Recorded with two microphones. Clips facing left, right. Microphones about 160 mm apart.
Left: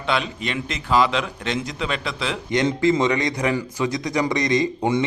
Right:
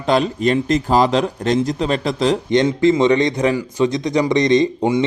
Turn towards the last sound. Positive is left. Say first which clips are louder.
# right 5 dB
turn(degrees=-15)  # may be behind; listen again after turning